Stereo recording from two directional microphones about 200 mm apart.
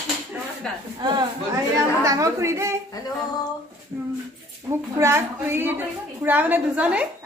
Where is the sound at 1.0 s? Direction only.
20° right (ahead or behind).